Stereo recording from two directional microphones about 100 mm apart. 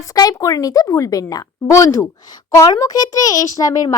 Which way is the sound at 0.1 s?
35° left (ahead or behind).